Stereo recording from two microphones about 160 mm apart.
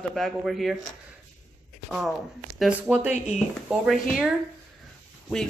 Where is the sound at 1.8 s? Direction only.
Centre (ahead or behind).